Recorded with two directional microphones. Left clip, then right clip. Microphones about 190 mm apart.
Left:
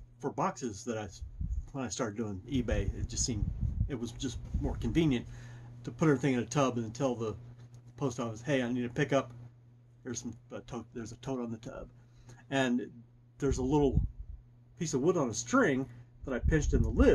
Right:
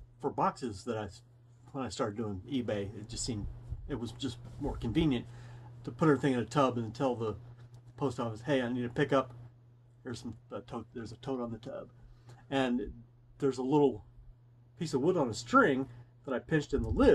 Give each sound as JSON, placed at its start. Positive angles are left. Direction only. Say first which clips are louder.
{"t": 0.2, "sound": "speech", "louder": "right 2 dB", "side_deg": 10}